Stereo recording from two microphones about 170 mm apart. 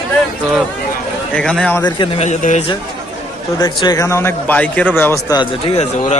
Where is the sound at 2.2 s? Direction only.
45° left (ahead or behind).